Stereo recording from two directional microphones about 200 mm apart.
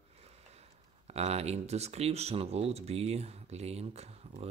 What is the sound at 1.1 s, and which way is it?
Speech, 30° right (ahead or behind).